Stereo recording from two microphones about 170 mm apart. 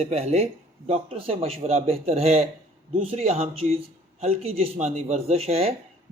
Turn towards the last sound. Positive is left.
turn(degrees=-35)  # may be behind; listen again after turning